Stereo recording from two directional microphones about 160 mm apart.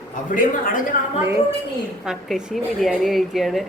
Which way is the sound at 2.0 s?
5° right (ahead or behind).